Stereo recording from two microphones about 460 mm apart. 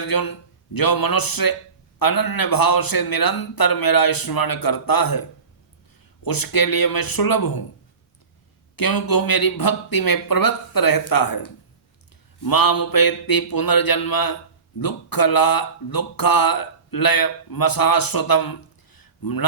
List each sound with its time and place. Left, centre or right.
0.1 s speech: left
6.2 s speech: left
8.7 s speech: left
18.9 s a sound: left